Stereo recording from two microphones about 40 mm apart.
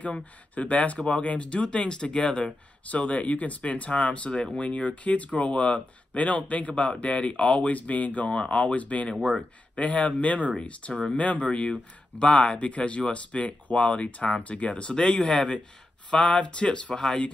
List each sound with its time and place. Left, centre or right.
0.0 s speech: left
2.9 s speech: left
8.3 s speech: left